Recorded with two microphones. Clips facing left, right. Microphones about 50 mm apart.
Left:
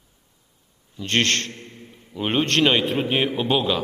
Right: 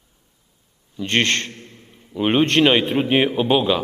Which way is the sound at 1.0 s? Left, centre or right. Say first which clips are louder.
Right 2 dB; centre.